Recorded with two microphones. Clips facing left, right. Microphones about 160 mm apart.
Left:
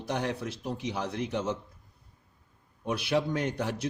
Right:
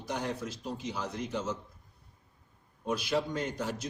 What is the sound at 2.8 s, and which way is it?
A man's voice, 60° left (ahead or behind).